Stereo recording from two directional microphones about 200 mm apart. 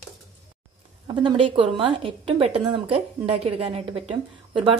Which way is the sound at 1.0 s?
25° right (ahead or behind).